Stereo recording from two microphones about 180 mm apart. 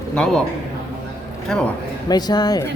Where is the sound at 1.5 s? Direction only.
5° left (ahead or behind).